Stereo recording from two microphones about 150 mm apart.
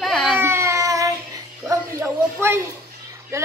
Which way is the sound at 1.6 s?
15° right (ahead or behind).